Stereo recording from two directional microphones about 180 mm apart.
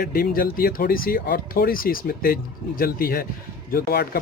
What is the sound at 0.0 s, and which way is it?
Speech, 55° left (ahead or behind).